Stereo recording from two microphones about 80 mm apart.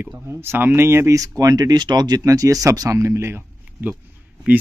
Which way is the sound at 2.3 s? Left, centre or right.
Right.